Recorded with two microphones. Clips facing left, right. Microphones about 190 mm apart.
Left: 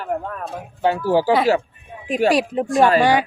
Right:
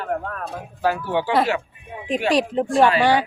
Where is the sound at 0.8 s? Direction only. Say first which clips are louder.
Left 4 dB; 30° left (ahead or behind).